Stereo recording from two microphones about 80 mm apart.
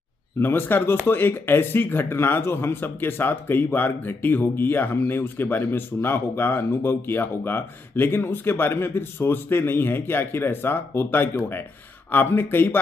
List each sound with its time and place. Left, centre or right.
0.4 s speech: left